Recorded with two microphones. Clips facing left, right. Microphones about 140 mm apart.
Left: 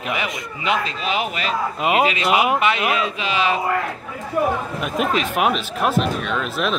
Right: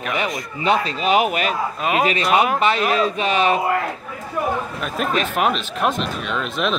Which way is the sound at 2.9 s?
40° right (ahead or behind).